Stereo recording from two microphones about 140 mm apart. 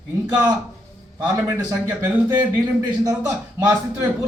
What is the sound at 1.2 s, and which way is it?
A man's voice, 25° right (ahead or behind).